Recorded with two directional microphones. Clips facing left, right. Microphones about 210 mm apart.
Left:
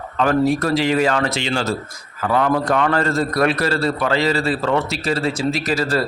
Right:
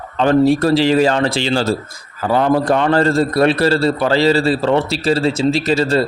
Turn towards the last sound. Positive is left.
turn(degrees=-25)  # may be behind; listen again after turning